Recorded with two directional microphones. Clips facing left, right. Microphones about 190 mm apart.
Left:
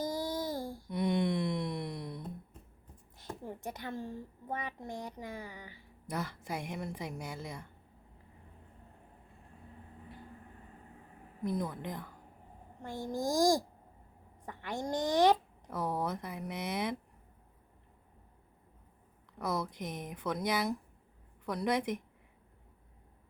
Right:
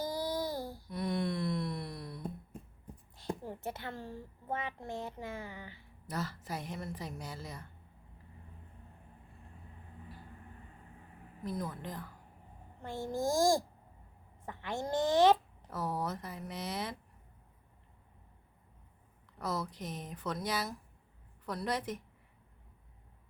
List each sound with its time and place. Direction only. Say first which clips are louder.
0.1 s babbling: even; 45° left (ahead or behind)
0.5 s a sound: left 1 dB; 45° left (ahead or behind)
0.9 s a sound: left 4 dB; 20° left (ahead or behind)
3.7 s a woman's voice: left 3 dB; 15° left (ahead or behind)
11.4 s a woman's voice: left 4 dB; 20° left (ahead or behind)
14.5 s a woman's voice: right 1 dB; 15° left (ahead or behind)
19.5 s a woman's voice: left 2 dB; 15° left (ahead or behind)